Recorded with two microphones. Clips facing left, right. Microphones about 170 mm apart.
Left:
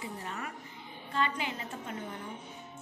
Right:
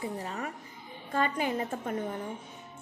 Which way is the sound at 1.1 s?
45° right (ahead or behind).